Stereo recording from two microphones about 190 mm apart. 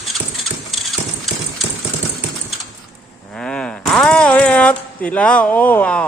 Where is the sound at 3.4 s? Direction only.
5° left (ahead or behind).